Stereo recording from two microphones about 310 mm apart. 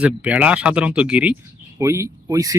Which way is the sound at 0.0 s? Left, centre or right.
Centre.